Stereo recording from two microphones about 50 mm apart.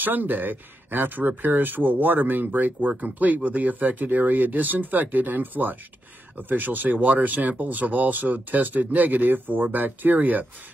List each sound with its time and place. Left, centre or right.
0.0 s speech: right